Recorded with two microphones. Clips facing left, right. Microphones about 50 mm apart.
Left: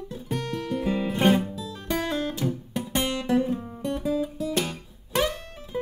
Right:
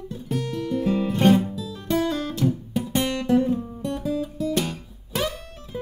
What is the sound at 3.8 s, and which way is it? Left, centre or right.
Guitar, centre.